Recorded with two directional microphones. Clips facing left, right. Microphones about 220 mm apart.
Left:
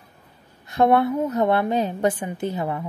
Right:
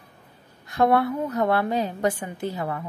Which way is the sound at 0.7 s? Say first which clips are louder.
Left 2 dB; 25° left (ahead or behind).